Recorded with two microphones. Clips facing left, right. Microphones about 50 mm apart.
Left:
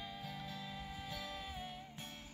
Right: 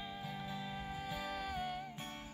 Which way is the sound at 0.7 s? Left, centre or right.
Right.